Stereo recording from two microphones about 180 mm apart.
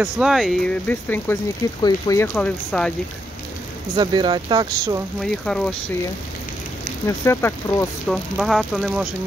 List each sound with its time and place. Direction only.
0.0 s speech: centre (ahead or behind); by 2.2 s 20° left (ahead or behind)
2.2 s speech: 5° left (ahead or behind)
3.9 s speech: 25° right (ahead or behind)
5.2 s speech: 5° left (ahead or behind)
7.1 s speech: 15° left (ahead or behind)
8.1 s speech: centre (ahead or behind)